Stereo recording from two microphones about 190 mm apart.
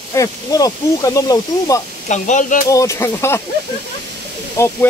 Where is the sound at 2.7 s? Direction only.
15° left (ahead or behind).